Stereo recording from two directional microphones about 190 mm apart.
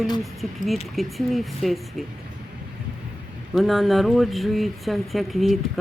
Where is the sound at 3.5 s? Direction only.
Centre (ahead or behind).